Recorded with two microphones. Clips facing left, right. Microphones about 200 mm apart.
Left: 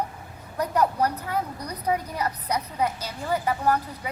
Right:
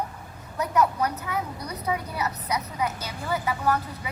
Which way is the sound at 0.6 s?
35° left (ahead or behind).